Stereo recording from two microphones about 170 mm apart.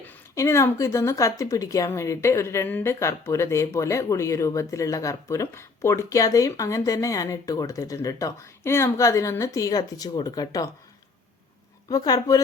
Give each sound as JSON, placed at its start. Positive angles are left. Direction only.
{"t": 0.0, "sound": "a woman's voice", "side_deg": 10}
{"t": 11.9, "sound": "speech", "side_deg": 25}